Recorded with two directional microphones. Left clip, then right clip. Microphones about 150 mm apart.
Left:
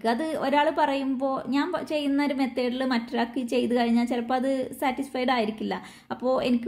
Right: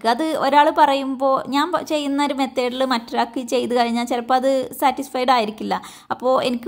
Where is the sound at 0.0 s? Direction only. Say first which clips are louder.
Right 7 dB; 20° right (ahead or behind).